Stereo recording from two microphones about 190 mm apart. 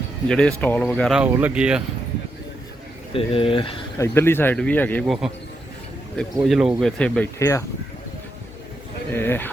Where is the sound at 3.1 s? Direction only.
30° left (ahead or behind).